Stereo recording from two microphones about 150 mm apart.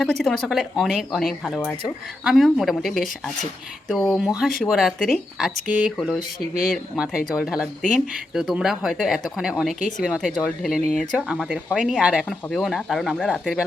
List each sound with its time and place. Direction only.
0.0 s speech: centre (ahead or behind)
6.5 s speech: 75° left (ahead or behind)
7.3 s speech: 5° right (ahead or behind)